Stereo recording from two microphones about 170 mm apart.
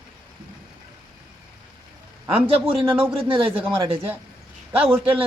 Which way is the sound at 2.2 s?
10° right (ahead or behind).